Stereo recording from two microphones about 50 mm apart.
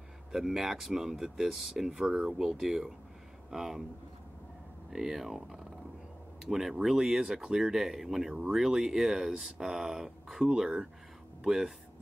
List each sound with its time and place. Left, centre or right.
0.3 s speech: centre
4.9 s speech: centre
10.4 s speech: centre